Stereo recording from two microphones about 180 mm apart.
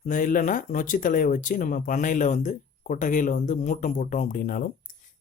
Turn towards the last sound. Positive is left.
turn(degrees=50)  # may be behind; listen again after turning